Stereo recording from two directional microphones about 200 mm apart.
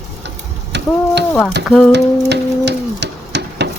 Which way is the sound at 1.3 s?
10° left (ahead or behind).